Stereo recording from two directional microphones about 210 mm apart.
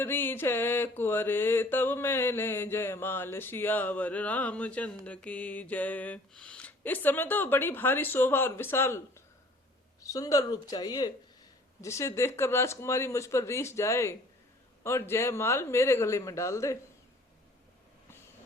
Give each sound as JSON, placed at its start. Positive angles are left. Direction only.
{"t": 0.0, "sound": "mantra", "side_deg": 10}